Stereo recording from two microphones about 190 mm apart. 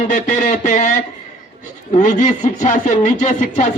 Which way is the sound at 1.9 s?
40° left (ahead or behind).